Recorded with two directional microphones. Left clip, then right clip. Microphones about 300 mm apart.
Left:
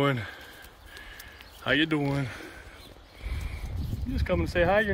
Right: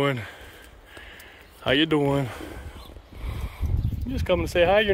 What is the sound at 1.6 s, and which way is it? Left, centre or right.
Speech, centre.